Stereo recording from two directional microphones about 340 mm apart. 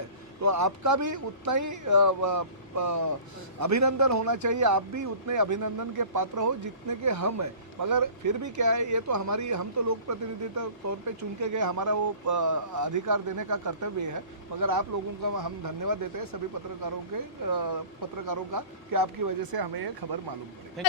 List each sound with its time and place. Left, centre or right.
0.4 s a man's voice: right
17.5 s speech: right